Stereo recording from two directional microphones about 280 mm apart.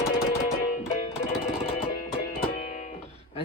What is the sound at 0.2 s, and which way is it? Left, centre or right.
Music, left.